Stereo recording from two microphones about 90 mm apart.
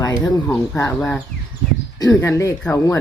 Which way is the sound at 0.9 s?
10° left (ahead or behind).